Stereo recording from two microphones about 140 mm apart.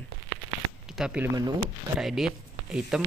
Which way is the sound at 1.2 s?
25° right (ahead or behind).